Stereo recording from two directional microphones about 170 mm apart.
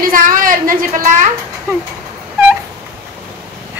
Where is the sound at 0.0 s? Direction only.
55° right (ahead or behind).